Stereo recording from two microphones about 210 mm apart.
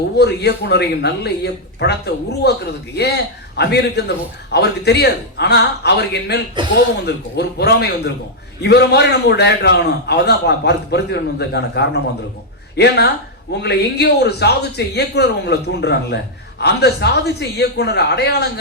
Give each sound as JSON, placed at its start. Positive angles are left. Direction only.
{"t": 0.2, "sound": "speech", "side_deg": 55}